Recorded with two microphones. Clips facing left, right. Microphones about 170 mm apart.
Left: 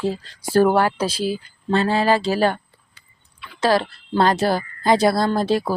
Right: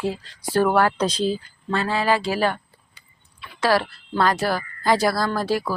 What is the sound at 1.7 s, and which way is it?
Speech, 30° left (ahead or behind).